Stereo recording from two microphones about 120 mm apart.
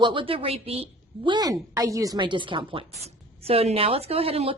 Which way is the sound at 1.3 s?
30° right (ahead or behind).